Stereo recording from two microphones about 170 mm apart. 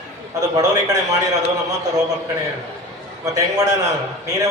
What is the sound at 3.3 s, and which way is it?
Speech, 20° right (ahead or behind).